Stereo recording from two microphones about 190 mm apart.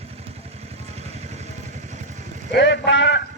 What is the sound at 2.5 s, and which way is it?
Speech, 65° left (ahead or behind).